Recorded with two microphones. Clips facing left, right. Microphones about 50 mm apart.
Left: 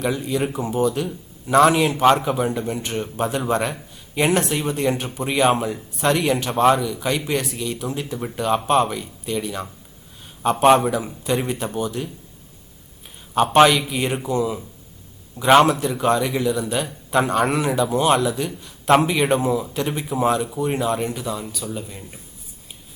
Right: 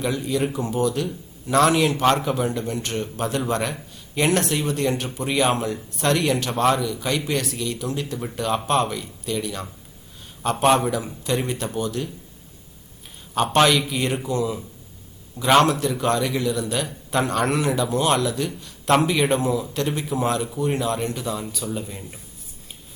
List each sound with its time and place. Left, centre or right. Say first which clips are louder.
0.0 s speech: left 1 dB; centre
13.3 s speech: left 4 dB; centre